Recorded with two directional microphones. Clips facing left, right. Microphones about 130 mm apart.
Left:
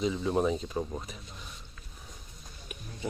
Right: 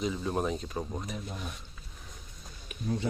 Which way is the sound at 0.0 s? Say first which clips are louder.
Left 3 dB; 5° right (ahead or behind).